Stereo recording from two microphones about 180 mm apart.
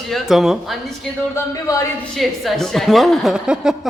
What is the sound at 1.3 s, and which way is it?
Speech, 15° left (ahead or behind).